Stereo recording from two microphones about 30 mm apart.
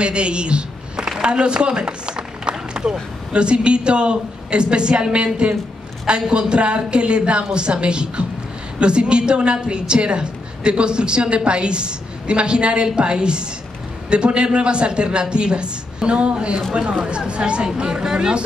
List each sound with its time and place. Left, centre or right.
0.0 s a woman's voice: right
2.7 s a sound: right
3.3 s a woman's voice: right